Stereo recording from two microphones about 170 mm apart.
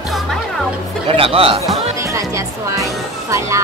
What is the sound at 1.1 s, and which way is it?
Speech, 35° right (ahead or behind).